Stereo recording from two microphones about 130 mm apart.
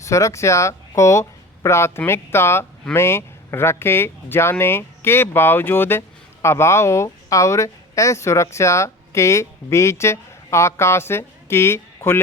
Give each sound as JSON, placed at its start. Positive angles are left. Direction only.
{"t": 0.0, "sound": "speech", "side_deg": 25}